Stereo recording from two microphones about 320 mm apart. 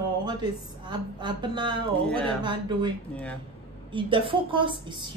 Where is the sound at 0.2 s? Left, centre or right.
Centre.